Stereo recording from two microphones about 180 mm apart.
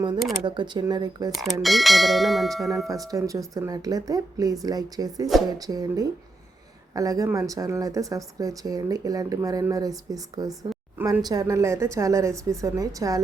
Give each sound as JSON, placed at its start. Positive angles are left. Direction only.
{"t": 0.4, "sound": "speech", "side_deg": -25}
{"t": 1.3, "sound": "bell", "side_deg": 0}
{"t": 3.1, "sound": "speech", "side_deg": -20}